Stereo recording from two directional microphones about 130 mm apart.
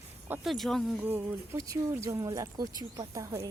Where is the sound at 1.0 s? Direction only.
15° right (ahead or behind).